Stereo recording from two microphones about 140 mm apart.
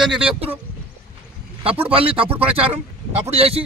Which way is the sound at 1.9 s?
40° right (ahead or behind).